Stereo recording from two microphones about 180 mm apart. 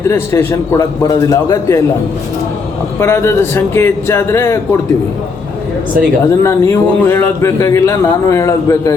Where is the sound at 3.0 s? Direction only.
15° left (ahead or behind).